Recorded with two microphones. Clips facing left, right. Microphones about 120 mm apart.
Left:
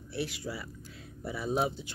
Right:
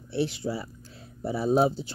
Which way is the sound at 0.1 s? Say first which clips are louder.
Right 8 dB; 25° right (ahead or behind).